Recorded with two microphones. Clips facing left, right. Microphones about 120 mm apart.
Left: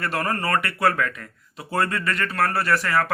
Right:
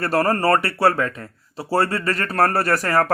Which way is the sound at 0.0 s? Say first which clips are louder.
Right 7 dB; 35° right (ahead or behind).